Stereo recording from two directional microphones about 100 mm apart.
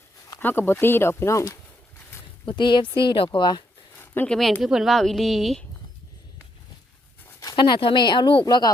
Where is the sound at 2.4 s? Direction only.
50° left (ahead or behind).